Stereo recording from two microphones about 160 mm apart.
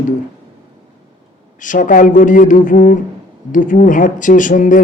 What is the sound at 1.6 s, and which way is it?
Speech, 55° left (ahead or behind).